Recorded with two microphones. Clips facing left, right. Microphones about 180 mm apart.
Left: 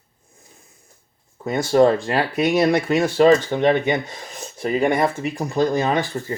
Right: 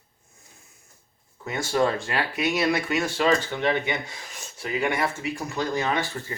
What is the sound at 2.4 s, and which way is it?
Speech, 55° left (ahead or behind).